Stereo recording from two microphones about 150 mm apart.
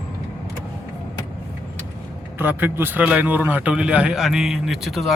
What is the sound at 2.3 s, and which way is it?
A man's voice, 15° right (ahead or behind).